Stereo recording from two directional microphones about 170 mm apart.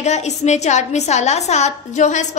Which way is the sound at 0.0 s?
40° left (ahead or behind).